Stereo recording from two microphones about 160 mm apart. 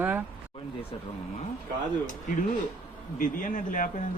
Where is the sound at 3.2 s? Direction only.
55° left (ahead or behind).